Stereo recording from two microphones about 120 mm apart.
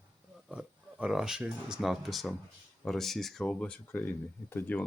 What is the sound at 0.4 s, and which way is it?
Speech, 10° right (ahead or behind).